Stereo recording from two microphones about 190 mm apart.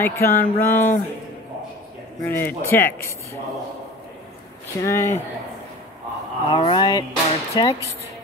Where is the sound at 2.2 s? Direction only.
10° left (ahead or behind).